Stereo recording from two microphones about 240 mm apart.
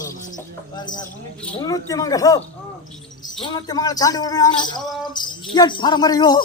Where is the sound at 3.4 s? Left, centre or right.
Centre.